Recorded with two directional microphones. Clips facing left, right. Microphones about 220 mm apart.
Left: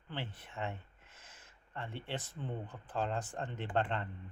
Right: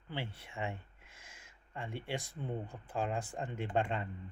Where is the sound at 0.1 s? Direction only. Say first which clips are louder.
Right 1 dB; 10° right (ahead or behind).